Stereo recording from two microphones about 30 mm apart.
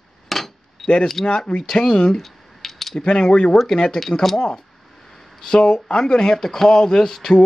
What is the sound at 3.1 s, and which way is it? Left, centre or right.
Speech, left.